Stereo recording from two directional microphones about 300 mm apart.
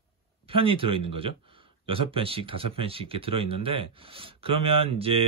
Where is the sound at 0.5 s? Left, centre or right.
Centre.